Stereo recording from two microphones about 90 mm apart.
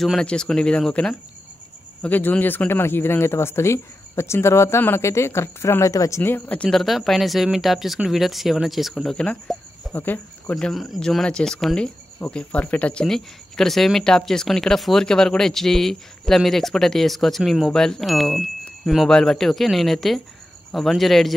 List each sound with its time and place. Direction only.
0.0 s speech: centre (ahead or behind); by 6.6 s 25° left (ahead or behind)
6.6 s speech: 5° left (ahead or behind); by 10.5 s 20° left (ahead or behind)
10.5 s speech: 5° left (ahead or behind)
13.0 s speech: 5° left (ahead or behind)